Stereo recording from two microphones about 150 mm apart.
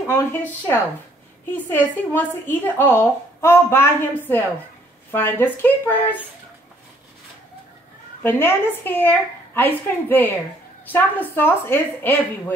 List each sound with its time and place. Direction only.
0.0 s a woman's voice: 20° left (ahead or behind)
8.2 s a woman's voice: 15° left (ahead or behind)